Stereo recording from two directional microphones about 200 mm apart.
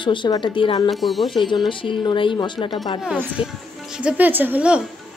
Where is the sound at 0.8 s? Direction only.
Centre (ahead or behind).